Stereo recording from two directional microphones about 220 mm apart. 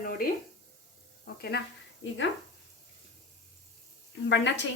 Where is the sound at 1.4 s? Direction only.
50° left (ahead or behind).